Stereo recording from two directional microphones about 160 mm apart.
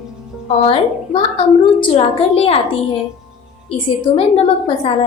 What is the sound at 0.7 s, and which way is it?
A woman's voice, 35° left (ahead or behind).